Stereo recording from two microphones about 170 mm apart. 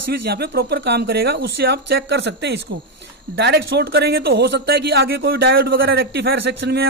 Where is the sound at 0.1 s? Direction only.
80° right.